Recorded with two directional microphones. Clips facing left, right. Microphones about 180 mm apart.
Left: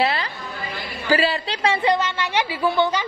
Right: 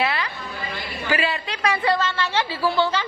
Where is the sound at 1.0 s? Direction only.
35° left (ahead or behind).